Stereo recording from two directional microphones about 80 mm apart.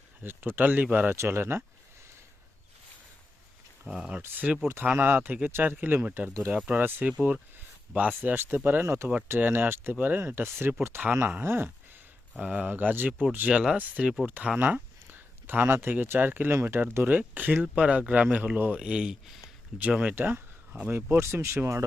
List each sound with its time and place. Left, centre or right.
0.2 s speech: right
1.1 s speech: right
3.8 s speech: centre
4.1 s speech: centre
12.4 s speech: centre
20.1 s speech: right